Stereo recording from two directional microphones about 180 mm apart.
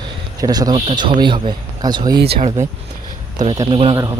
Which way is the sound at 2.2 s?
60° right (ahead or behind).